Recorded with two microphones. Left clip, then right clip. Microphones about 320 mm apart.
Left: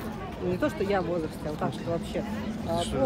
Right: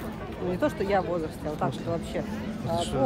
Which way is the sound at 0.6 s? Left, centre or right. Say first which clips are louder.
Right 2 dB; right.